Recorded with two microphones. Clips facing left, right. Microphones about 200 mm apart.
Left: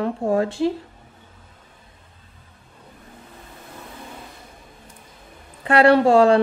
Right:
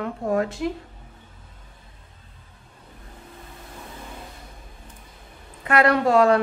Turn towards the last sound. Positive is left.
turn(degrees=30)  # may be behind; listen again after turning